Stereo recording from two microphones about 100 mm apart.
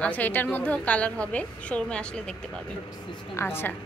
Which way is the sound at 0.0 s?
15° left (ahead or behind).